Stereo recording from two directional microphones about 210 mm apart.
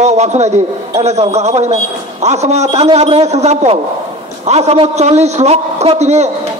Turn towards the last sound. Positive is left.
turn(degrees=-30)  # may be behind; listen again after turning